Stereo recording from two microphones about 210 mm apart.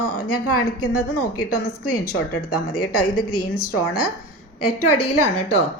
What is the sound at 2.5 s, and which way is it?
A woman's voice, 90° left.